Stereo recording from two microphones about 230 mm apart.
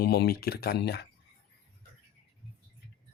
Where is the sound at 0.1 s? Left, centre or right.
Left.